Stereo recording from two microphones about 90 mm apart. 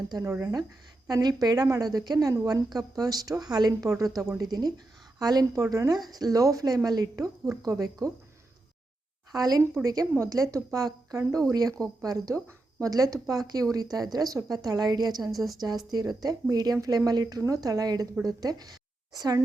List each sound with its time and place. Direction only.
0.1 s a woman's voice: 40° right (ahead or behind)
9.3 s a woman's voice: 40° right (ahead or behind)
15.3 s a woman's voice: centre (ahead or behind)
15.9 s a woman's voice: 45° right (ahead or behind)